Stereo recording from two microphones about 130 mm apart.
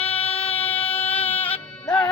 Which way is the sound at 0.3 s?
50° left (ahead or behind).